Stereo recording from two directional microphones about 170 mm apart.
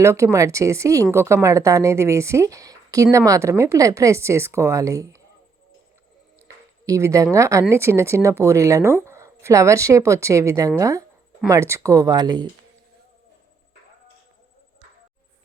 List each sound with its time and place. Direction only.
0.0 s speech: 15° right (ahead or behind)
6.8 s speech: 20° right (ahead or behind)